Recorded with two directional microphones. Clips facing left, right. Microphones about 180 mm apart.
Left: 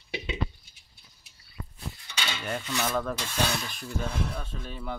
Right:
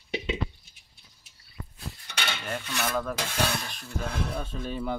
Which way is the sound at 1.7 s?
65° right (ahead or behind).